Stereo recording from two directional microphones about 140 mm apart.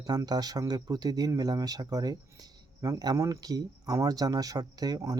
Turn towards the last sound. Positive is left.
turn(degrees=-30)  # may be behind; listen again after turning